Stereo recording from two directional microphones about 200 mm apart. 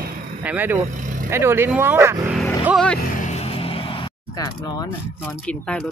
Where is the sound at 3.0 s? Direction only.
35° left (ahead or behind).